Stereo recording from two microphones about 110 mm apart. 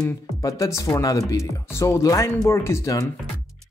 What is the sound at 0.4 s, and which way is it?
Speech, 30° left (ahead or behind).